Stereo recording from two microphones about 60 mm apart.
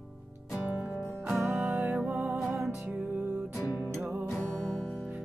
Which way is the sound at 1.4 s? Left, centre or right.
Right.